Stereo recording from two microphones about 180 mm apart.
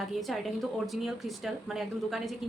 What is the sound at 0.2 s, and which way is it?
A woman's voice, centre (ahead or behind).